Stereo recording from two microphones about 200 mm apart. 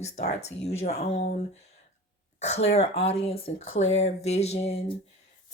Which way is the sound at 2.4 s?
35° left (ahead or behind).